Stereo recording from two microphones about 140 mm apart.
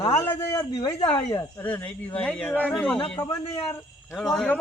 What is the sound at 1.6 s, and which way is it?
Speech, 10° left (ahead or behind).